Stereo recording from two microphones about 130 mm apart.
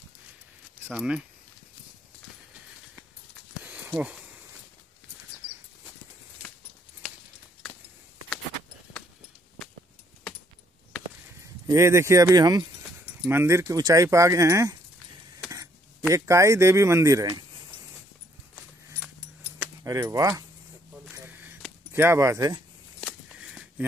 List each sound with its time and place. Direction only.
0.8 s speech: 10° right (ahead or behind)
3.6 s a sound: 10° right (ahead or behind)
11.6 s speech: 20° right (ahead or behind)
13.2 s speech: 20° right (ahead or behind)
16.1 s speech: 25° right (ahead or behind)
19.8 s speech: 25° right (ahead or behind)
21.1 s a sound: 10° right (ahead or behind)
21.9 s speech: 20° right (ahead or behind)
22.9 s a sound: centre (ahead or behind)